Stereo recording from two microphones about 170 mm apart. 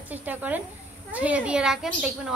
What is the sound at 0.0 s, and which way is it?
A woman's voice, 10° right (ahead or behind).